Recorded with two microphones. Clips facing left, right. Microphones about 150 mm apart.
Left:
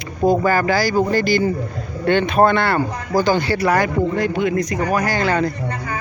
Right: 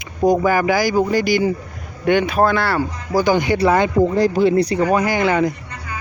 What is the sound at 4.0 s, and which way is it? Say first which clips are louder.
Speech: right 4 dB; 35° right (ahead or behind).